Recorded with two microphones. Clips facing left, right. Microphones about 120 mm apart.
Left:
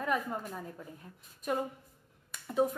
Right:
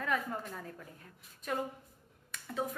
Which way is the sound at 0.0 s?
15° left (ahead or behind).